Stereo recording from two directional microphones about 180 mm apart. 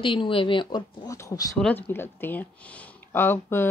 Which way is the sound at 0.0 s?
30° left (ahead or behind).